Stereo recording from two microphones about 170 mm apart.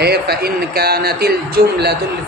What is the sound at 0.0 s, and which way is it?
A man's voice, 70° right (ahead or behind).